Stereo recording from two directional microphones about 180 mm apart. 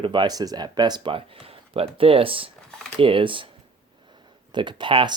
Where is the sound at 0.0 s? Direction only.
25° right (ahead or behind).